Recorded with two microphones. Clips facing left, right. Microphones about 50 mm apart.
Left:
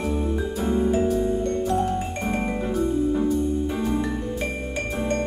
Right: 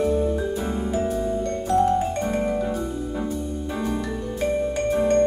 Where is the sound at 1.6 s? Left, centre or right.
Right.